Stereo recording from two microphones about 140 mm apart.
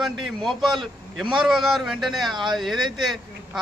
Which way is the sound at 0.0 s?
Centre (ahead or behind).